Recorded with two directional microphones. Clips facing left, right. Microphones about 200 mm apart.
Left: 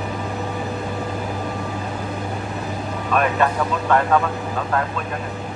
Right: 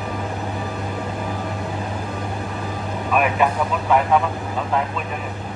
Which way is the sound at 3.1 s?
10° right (ahead or behind).